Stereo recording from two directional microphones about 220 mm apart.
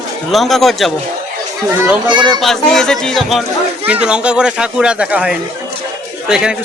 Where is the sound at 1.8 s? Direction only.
15° right (ahead or behind).